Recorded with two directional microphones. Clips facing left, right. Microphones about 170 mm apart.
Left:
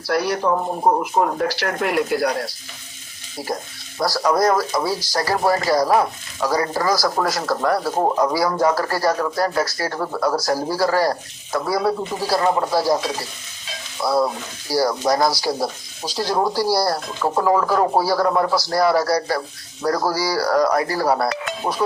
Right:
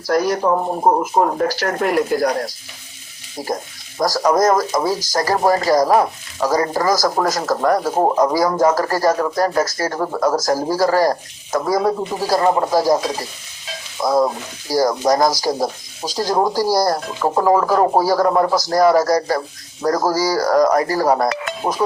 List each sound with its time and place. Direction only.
0.1 s speech: 45° right (ahead or behind)